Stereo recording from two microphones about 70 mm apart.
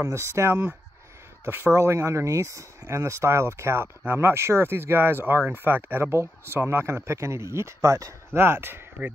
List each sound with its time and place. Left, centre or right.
0.0 s speech: right
1.7 s speech: right
8.3 s speech: right